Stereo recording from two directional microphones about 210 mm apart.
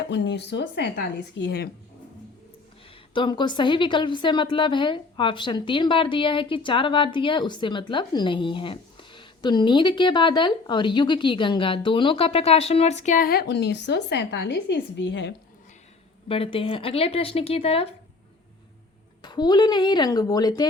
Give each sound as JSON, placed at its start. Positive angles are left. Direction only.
{"t": 0.1, "sound": "speech", "side_deg": 55}
{"t": 3.2, "sound": "a woman's voice", "side_deg": 20}
{"t": 16.3, "sound": "a woman's voice", "side_deg": 25}
{"t": 19.2, "sound": "a woman's voice", "side_deg": 20}